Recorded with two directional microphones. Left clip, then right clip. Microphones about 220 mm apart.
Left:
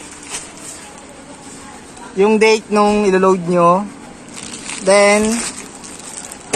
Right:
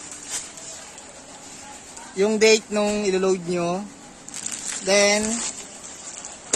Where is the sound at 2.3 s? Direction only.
5° right (ahead or behind).